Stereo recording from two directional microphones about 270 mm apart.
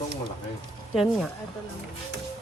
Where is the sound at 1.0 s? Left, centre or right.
Centre.